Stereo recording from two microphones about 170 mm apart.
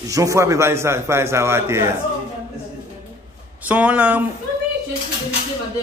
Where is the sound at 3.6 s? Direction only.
10° right (ahead or behind).